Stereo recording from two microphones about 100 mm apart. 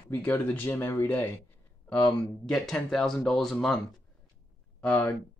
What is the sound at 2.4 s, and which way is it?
Speech, 10° left (ahead or behind).